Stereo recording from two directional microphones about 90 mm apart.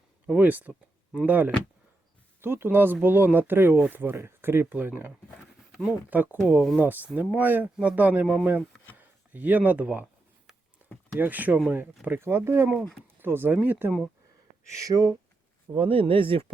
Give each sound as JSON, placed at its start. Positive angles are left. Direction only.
{"t": 0.3, "sound": "speech", "side_deg": -20}
{"t": 6.5, "sound": "speech", "side_deg": 0}
{"t": 6.7, "sound": "speech", "side_deg": -20}
{"t": 11.1, "sound": "speech", "side_deg": -20}
{"t": 14.7, "sound": "speech", "side_deg": -40}
{"t": 15.7, "sound": "speech", "side_deg": -90}